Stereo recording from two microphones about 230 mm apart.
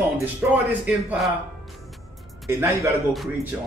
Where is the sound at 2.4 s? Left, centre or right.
Centre.